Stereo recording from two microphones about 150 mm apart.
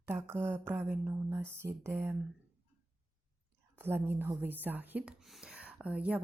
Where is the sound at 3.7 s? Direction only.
15° right (ahead or behind).